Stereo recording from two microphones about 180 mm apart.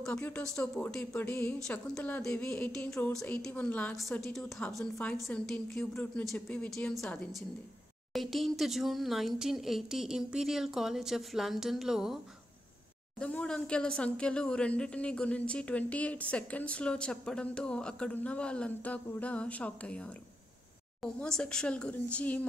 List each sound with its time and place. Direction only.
0.0 s speech: 10° left (ahead or behind)
13.2 s speech: 5° left (ahead or behind)